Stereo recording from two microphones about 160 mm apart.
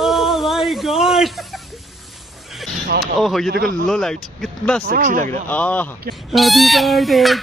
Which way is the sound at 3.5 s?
70° right (ahead or behind).